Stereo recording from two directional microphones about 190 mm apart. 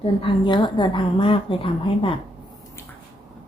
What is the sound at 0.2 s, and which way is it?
A woman's voice, 25° left (ahead or behind).